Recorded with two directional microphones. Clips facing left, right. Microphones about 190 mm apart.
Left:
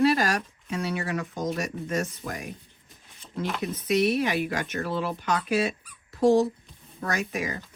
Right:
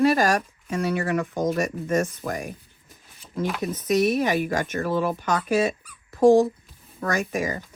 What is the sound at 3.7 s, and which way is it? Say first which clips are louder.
Speech: right 2 dB; 45° right (ahead or behind).